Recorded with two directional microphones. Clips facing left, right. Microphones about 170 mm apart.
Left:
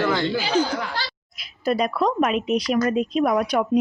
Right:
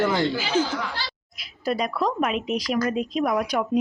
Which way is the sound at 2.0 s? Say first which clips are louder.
Left 3 dB; 45° left (ahead or behind).